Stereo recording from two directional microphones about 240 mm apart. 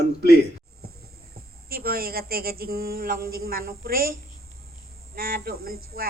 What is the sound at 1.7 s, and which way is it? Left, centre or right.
A woman's voice, right.